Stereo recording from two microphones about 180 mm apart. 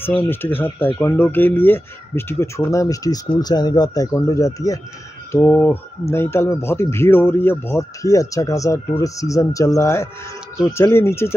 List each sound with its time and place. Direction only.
0.0 s speech: 10° left (ahead or behind)